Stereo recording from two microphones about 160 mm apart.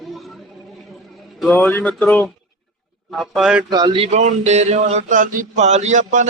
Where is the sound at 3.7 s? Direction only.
25° right (ahead or behind); by 6.2 s 50° right (ahead or behind).